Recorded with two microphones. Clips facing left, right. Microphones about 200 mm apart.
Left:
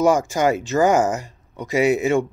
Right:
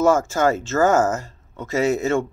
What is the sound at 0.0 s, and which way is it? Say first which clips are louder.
Speech: even; 15° left (ahead or behind).